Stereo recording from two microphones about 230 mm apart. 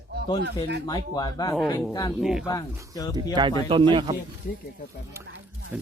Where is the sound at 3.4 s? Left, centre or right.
Centre.